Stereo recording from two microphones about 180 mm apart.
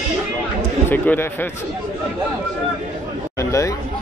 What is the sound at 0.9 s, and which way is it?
Speech, 10° left (ahead or behind).